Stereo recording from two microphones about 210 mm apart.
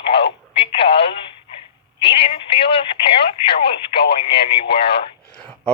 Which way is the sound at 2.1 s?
25° left (ahead or behind).